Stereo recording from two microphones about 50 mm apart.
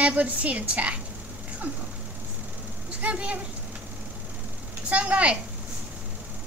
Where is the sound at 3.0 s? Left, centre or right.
Right.